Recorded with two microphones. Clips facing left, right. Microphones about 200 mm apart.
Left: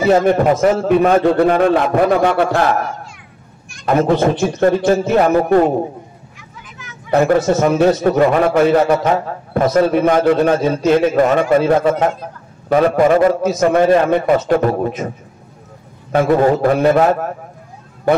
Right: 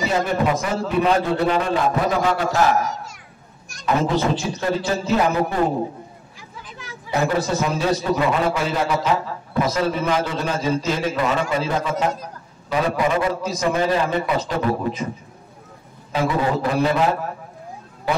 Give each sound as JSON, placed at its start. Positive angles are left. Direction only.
{"t": 0.0, "sound": "a man's voice", "side_deg": 55}
{"t": 7.4, "sound": "a man's voice", "side_deg": 55}
{"t": 16.1, "sound": "a man's voice", "side_deg": 55}